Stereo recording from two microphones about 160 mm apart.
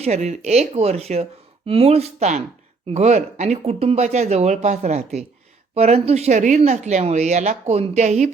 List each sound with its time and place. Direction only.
0.0 s speech: 45° right (ahead or behind)